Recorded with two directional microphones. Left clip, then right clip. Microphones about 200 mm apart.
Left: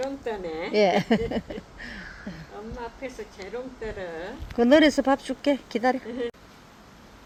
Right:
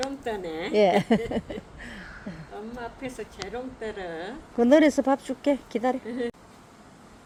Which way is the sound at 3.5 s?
60° right (ahead or behind).